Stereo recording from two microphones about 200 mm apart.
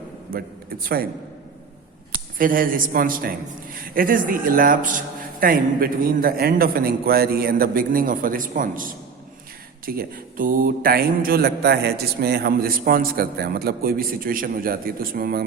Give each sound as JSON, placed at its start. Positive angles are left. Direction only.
{"t": 0.3, "sound": "a man's voice", "side_deg": -50}
{"t": 2.1, "sound": "speech", "side_deg": -45}